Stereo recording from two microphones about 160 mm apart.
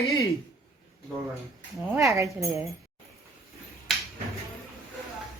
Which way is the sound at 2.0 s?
20° right (ahead or behind).